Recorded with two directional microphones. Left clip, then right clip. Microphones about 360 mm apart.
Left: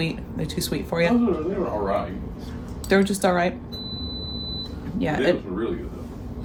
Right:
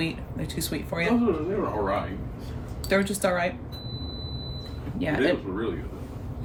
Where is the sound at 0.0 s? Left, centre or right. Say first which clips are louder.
Left 2 dB; centre.